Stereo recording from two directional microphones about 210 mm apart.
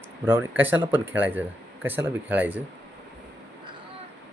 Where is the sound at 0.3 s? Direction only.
10° right (ahead or behind).